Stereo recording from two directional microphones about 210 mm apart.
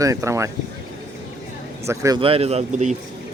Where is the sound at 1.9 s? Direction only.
20° right (ahead or behind); by 3.0 s 35° right (ahead or behind).